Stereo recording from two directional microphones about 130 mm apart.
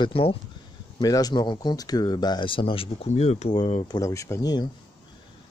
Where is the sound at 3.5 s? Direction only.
40° left (ahead or behind).